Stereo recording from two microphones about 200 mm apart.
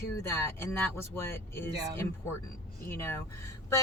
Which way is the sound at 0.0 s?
15° left (ahead or behind).